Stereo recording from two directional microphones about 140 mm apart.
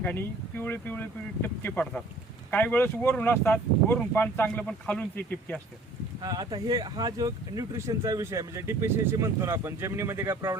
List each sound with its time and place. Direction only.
0.0 s speech: 15° left (ahead or behind)
6.2 s speech: 30° right (ahead or behind)